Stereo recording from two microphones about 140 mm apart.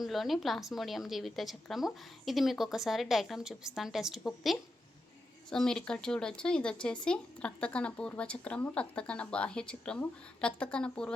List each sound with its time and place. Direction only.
0.0 s a woman's voice: centre (ahead or behind)